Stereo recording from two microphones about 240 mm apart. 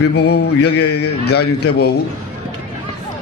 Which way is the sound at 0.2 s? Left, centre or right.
Left.